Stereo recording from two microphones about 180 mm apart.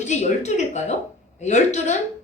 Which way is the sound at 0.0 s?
40° left (ahead or behind).